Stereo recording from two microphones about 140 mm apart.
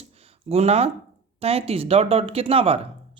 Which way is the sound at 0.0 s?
45° right (ahead or behind).